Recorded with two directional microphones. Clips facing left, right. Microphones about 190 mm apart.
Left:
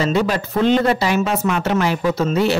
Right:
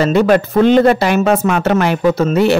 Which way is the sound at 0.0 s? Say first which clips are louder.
Right 7 dB; 55° right (ahead or behind).